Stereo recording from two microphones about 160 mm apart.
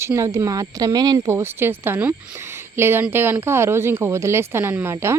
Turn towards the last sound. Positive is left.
turn(degrees=-15)  # may be behind; listen again after turning